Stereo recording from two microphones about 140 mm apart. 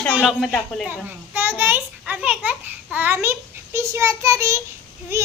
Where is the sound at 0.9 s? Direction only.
15° right (ahead or behind).